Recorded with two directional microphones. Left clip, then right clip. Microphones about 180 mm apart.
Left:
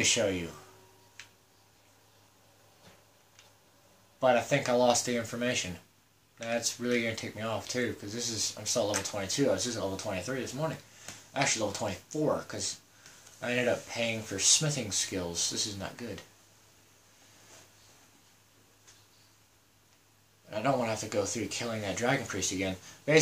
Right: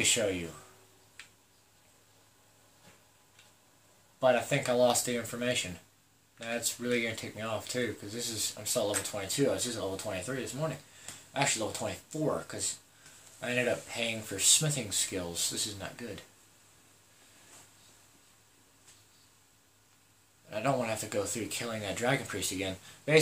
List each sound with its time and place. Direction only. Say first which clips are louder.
0.0 s speech: left 1 dB; 10° right (ahead or behind)
4.2 s speech: left 1 dB; 10° right (ahead or behind)
20.4 s speech: left 1 dB; 15° right (ahead or behind)